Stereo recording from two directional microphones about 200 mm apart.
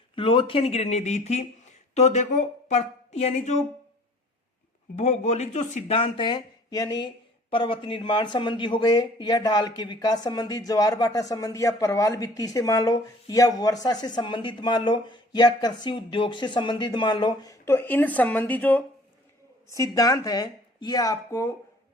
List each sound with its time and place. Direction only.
0.2 s speech: 25° left (ahead or behind)
4.9 s a man's voice: 35° left (ahead or behind); by 21.5 s 15° left (ahead or behind)